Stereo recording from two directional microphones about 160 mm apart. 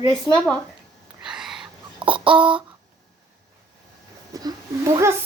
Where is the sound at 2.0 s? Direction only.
30° right (ahead or behind).